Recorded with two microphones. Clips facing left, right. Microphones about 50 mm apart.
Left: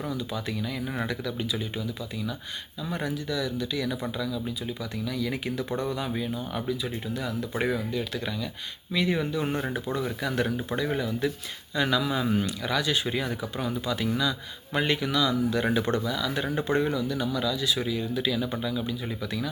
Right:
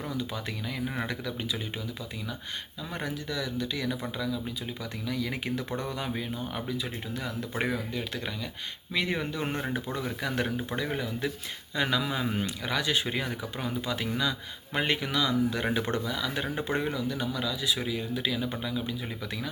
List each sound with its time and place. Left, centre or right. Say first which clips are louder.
0.3 s speech: left 3 dB; right
2.9 s speech: left 4 dB; right
5.0 s speech: left 1 dB; right
7.7 s speech: left 3 dB; right